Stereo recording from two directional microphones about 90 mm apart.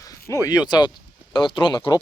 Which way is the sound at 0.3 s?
40° left (ahead or behind).